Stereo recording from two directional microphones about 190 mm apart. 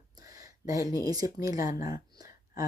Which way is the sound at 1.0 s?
20° right (ahead or behind).